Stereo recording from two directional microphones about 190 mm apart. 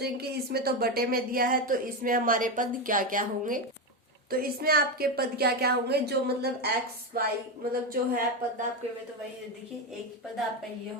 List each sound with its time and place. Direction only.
0.0 s a woman's voice: 55° right (ahead or behind)